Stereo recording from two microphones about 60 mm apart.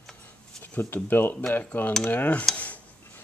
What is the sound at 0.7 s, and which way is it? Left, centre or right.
Speech, left.